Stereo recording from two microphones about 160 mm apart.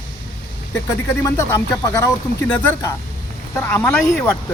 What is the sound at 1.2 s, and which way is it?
Speech, 20° left (ahead or behind).